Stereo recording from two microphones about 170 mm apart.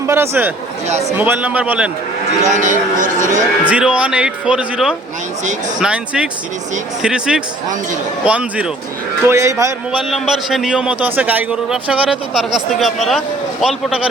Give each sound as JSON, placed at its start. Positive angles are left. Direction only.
{"t": 0.0, "sound": "speech", "side_deg": -15}
{"t": 0.9, "sound": "a man's voice", "side_deg": -40}
{"t": 1.1, "sound": "speech", "side_deg": -10}
{"t": 2.4, "sound": "speech", "side_deg": -45}
{"t": 3.7, "sound": "a man's voice", "side_deg": -5}
{"t": 9.2, "sound": "speech", "side_deg": -20}
{"t": 10.1, "sound": "a man's voice", "side_deg": 0}